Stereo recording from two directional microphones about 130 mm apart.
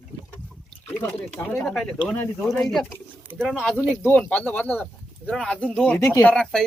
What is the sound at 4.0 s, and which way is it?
Speech, 15° left (ahead or behind).